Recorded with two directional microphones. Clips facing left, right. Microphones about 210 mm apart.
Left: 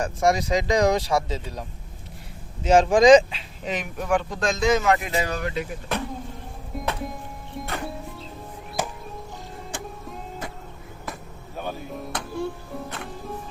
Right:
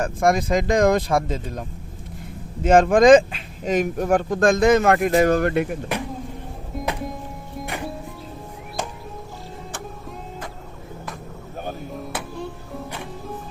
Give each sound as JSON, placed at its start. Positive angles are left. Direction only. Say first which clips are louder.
{"t": 0.0, "sound": "speech", "louder": "right 2 dB", "side_deg": -55}
{"t": 2.6, "sound": "speech", "louder": "right 2 dB", "side_deg": -55}
{"t": 6.7, "sound": "music", "louder": "right 2 dB", "side_deg": 0}
{"t": 7.6, "sound": "music", "louder": "right 1 dB", "side_deg": -15}
{"t": 12.1, "sound": "music", "louder": "right 2 dB", "side_deg": -5}